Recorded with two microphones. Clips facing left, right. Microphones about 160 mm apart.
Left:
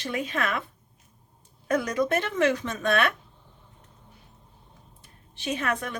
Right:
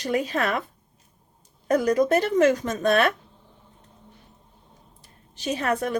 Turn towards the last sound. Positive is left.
turn(degrees=-40)  # may be behind; listen again after turning